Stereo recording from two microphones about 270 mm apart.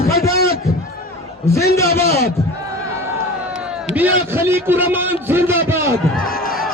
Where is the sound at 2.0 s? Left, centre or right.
Left.